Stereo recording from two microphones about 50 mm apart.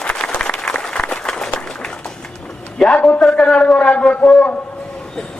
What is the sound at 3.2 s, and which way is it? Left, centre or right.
A man's voice, centre.